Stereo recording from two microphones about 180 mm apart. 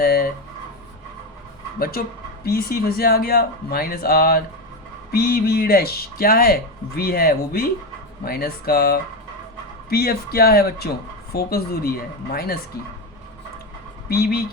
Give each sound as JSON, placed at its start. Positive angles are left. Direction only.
{"t": 0.0, "sound": "a sound", "side_deg": 55}
{"t": 1.8, "sound": "speech", "side_deg": 55}
{"t": 14.1, "sound": "speech", "side_deg": 55}